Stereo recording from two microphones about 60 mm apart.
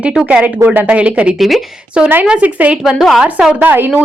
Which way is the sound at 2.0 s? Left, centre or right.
Centre.